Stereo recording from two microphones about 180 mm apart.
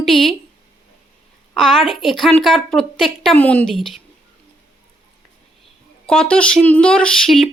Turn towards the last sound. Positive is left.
turn(degrees=0)  # may be behind; listen again after turning